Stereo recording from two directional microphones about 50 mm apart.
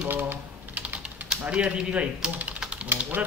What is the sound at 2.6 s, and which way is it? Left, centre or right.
Typewriter, right.